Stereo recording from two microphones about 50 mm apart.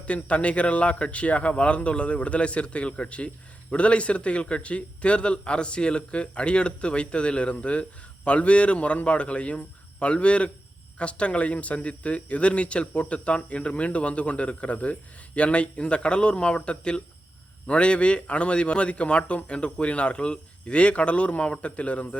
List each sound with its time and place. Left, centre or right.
0.0 s a man's voice: left